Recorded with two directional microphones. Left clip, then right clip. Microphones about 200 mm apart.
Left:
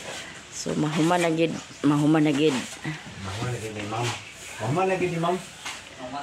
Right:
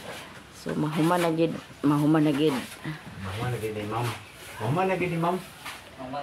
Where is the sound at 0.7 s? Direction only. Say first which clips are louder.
Left 2 dB; 10° left (ahead or behind).